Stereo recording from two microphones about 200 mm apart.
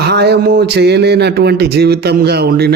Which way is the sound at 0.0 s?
55° right (ahead or behind).